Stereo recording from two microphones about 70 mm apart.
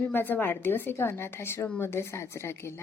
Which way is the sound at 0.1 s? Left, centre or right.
Left.